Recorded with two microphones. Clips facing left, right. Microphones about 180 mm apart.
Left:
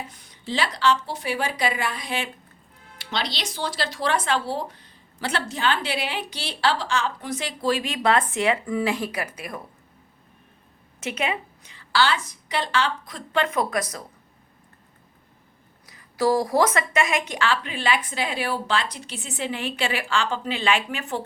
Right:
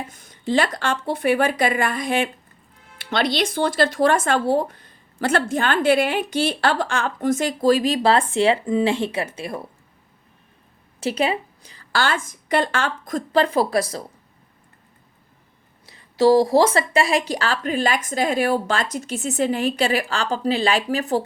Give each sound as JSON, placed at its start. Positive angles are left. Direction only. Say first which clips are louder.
{"t": 0.1, "sound": "speech", "louder": "right 9 dB", "side_deg": -45}
{"t": 11.0, "sound": "speech", "louder": "right 6 dB", "side_deg": -35}
{"t": 15.9, "sound": "speech", "louder": "right 6 dB", "side_deg": -25}